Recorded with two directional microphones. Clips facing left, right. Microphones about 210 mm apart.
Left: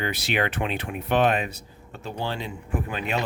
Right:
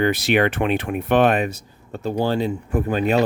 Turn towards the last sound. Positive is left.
turn(degrees=-40)  # may be behind; listen again after turning